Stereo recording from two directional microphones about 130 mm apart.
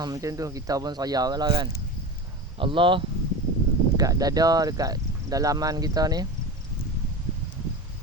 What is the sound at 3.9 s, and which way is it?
Speech, 30° right (ahead or behind).